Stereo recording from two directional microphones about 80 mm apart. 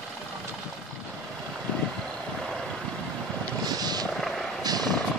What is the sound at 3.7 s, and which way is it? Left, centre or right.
Vehicle, right.